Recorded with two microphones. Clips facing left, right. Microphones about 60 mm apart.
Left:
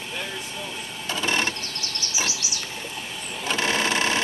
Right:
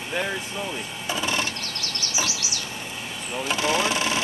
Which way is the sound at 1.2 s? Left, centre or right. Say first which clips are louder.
Left 3 dB; left.